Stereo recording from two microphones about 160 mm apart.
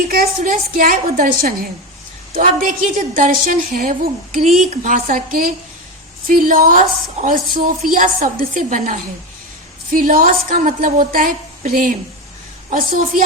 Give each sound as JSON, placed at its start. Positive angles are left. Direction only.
{"t": 0.1, "sound": "a woman's voice", "side_deg": -65}
{"t": 6.2, "sound": "a woman's voice", "side_deg": -60}